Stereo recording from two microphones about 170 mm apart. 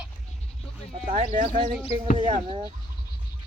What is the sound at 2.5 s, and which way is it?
Speech, 30° right (ahead or behind).